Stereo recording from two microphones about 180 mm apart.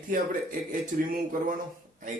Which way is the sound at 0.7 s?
50° right (ahead or behind).